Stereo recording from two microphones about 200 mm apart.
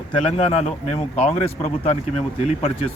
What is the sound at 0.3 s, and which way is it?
Speech, 30° left (ahead or behind).